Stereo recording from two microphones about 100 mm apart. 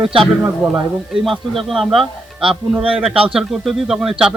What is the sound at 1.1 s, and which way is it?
A man's voice, centre (ahead or behind).